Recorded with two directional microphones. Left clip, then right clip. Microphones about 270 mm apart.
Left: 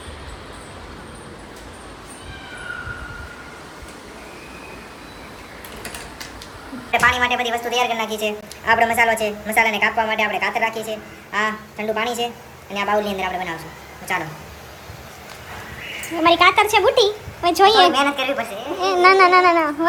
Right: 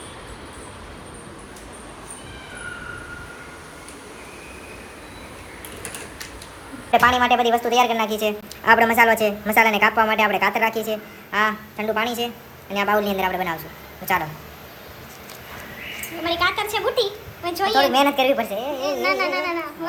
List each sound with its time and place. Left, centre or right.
6.9 s a woman's voice: centre
16.2 s a woman's voice: left
18.0 s a woman's voice: centre
18.8 s a woman's voice: left